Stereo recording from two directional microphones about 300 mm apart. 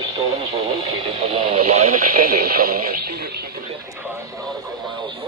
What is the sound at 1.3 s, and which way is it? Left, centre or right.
Radio, centre.